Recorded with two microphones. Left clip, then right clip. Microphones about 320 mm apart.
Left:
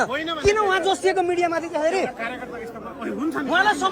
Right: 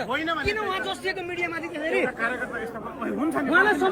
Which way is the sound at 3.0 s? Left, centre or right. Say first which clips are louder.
Even; centre.